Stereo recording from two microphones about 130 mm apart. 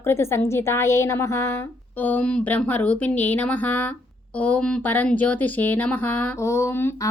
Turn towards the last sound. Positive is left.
turn(degrees=15)  # may be behind; listen again after turning